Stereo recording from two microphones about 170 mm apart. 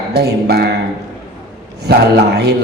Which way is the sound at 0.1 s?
70° right (ahead or behind).